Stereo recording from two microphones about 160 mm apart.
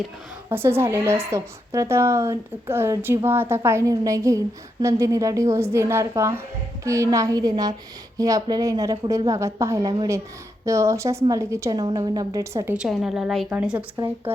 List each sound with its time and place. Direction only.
0.5 s a woman's voice: 15° right (ahead or behind)
12.7 s a woman's voice: 5° right (ahead or behind)